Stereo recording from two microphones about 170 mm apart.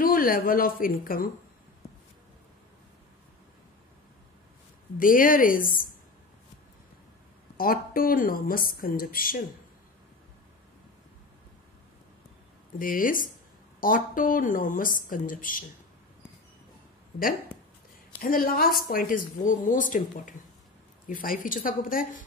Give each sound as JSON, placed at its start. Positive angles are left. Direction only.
{"t": 0.0, "sound": "speech", "side_deg": 55}
{"t": 4.9, "sound": "speech", "side_deg": 55}
{"t": 7.5, "sound": "speech", "side_deg": 55}
{"t": 12.7, "sound": "speech", "side_deg": 55}
{"t": 18.2, "sound": "speech", "side_deg": 55}